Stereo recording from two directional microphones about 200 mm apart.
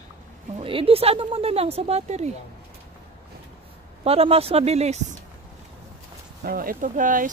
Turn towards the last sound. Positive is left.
turn(degrees=-40)  # may be behind; listen again after turning